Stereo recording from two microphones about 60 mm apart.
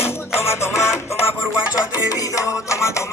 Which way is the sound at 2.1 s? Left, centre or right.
Left.